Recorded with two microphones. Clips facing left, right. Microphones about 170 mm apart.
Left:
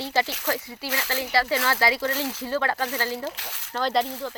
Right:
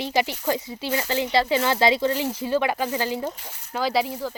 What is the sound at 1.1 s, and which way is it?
Speech, 20° right (ahead or behind).